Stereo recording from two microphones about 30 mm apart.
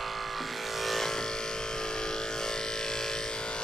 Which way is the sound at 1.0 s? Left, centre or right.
Centre.